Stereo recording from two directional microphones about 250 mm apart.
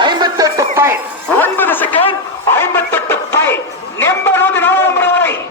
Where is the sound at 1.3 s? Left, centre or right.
Centre.